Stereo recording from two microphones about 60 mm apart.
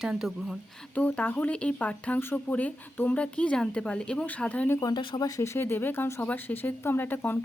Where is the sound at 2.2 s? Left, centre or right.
Left.